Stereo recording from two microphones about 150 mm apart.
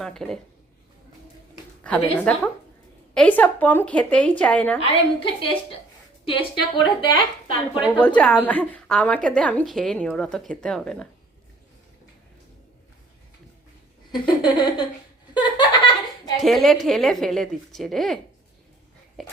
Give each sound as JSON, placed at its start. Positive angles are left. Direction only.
{"t": 0.0, "sound": "a woman's voice", "side_deg": 5}
{"t": 2.1, "sound": "speech", "side_deg": 10}
{"t": 4.8, "sound": "a woman's voice", "side_deg": 35}
{"t": 8.0, "sound": "a woman's voice", "side_deg": 5}
{"t": 14.1, "sound": "a woman's voice", "side_deg": 30}
{"t": 15.4, "sound": "a sound", "side_deg": 30}
{"t": 16.4, "sound": "a woman's voice", "side_deg": 0}